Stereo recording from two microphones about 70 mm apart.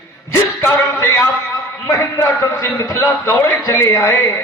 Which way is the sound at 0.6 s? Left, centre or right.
Left.